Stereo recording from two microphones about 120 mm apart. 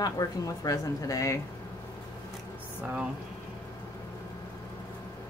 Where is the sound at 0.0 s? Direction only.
30° left (ahead or behind).